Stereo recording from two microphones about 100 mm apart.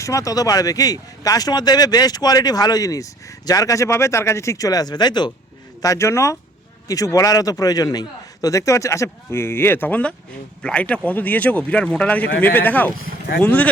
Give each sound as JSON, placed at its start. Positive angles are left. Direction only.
{"t": 0.0, "sound": "speech", "side_deg": 30}
{"t": 5.8, "sound": "speech", "side_deg": 30}